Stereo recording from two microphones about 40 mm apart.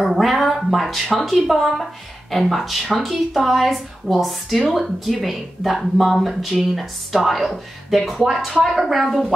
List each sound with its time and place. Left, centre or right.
0.0 s speech: centre